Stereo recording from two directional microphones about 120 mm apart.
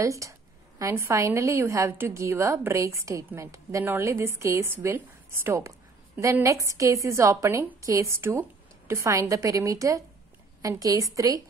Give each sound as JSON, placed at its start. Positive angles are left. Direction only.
{"t": 0.0, "sound": "a woman's voice", "side_deg": -25}